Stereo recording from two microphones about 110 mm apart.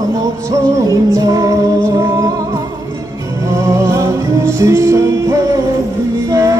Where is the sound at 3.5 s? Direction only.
25° right (ahead or behind).